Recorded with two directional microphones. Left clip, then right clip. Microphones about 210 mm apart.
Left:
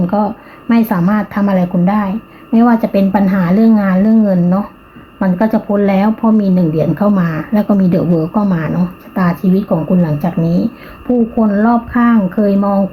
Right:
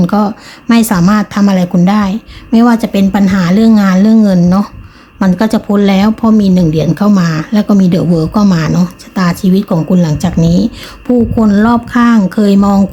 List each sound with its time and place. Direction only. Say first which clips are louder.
0.0 s speech: right 3 dB; 30° right (ahead or behind)